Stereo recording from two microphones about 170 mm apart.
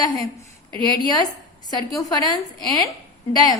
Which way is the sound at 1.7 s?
25° left (ahead or behind).